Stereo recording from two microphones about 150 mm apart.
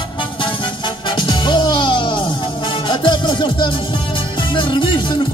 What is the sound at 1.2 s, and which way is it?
Music, 30° left (ahead or behind).